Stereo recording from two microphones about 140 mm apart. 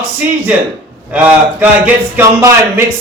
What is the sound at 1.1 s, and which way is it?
A man's voice, 10° right (ahead or behind).